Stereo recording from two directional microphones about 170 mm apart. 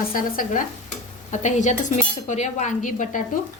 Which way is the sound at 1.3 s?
45° left (ahead or behind).